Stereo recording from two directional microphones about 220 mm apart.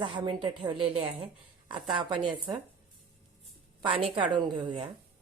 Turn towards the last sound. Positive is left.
turn(degrees=-20)  # may be behind; listen again after turning